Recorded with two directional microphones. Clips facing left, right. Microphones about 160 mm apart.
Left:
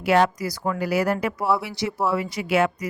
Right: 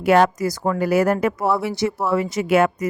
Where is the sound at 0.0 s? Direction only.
50° right (ahead or behind).